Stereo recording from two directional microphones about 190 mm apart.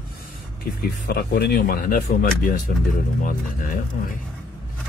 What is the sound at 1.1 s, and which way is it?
Speech, 55° left (ahead or behind).